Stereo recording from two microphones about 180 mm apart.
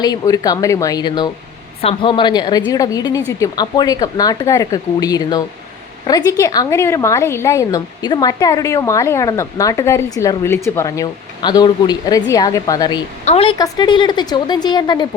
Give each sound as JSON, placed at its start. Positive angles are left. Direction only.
{"t": 0.0, "sound": "a woman's voice", "side_deg": 20}